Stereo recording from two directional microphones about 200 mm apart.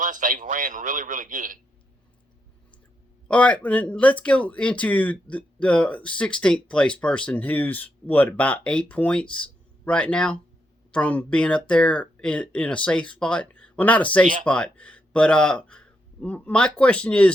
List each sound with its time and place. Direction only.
0.0 s a man's voice: 40° right (ahead or behind)
3.2 s speech: 5° left (ahead or behind)